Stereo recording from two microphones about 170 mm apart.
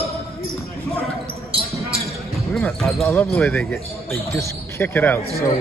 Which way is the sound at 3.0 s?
10° left (ahead or behind).